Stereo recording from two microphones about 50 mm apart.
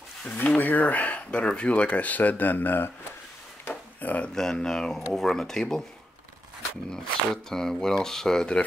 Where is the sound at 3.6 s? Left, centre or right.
Left.